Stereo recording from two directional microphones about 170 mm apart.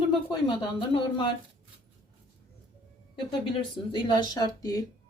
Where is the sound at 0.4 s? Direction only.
30° left (ahead or behind).